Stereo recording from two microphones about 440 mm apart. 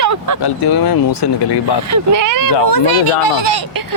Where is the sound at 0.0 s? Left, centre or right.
Right.